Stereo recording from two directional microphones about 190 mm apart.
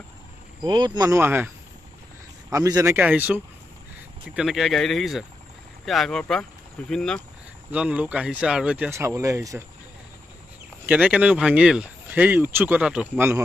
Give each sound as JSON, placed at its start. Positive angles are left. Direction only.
{"t": 0.7, "sound": "speech", "side_deg": -25}
{"t": 2.5, "sound": "speech", "side_deg": -15}
{"t": 10.9, "sound": "speech", "side_deg": -5}